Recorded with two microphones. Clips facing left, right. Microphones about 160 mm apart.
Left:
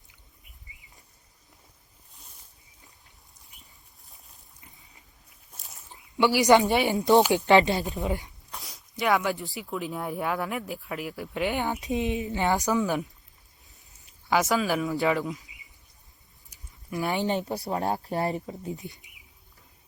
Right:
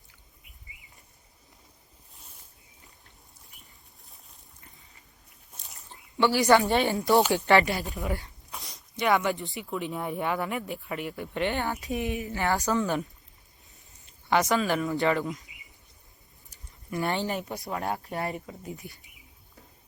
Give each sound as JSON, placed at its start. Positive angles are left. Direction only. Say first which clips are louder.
{"t": 5.5, "sound": "a sound", "louder": "even", "side_deg": 0}
{"t": 6.1, "sound": "a woman's voice", "louder": "left 2 dB", "side_deg": 15}
{"t": 8.4, "sound": "speech", "louder": "even", "side_deg": 0}
{"t": 11.5, "sound": "a woman's voice", "louder": "left 2 dB", "side_deg": 15}
{"t": 14.3, "sound": "speech", "louder": "even", "side_deg": 0}
{"t": 16.9, "sound": "speech", "louder": "even", "side_deg": 0}
{"t": 17.2, "sound": "speech", "louder": "left 4 dB", "side_deg": 20}